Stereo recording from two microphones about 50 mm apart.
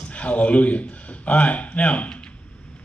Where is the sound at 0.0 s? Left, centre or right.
Left.